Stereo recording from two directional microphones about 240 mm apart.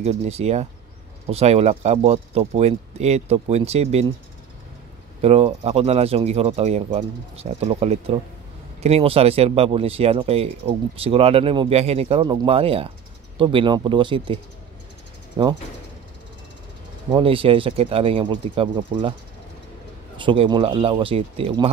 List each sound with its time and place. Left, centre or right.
0.0 s speech: right
5.2 s speech: right
17.1 s speech: right
20.2 s speech: right